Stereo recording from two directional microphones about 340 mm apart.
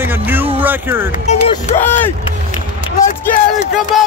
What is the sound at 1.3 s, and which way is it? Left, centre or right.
Speech, centre.